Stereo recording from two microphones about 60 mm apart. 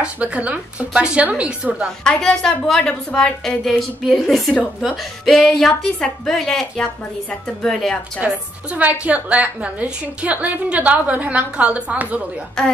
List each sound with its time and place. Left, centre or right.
0.0 s a woman's voice: right
2.0 s a woman's voice: centre
3.4 s a sound: centre
5.2 s speech: centre
8.6 s a woman's voice: right
12.6 s speech: centre